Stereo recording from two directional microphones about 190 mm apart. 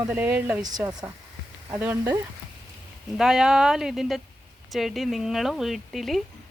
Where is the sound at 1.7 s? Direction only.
10° right (ahead or behind).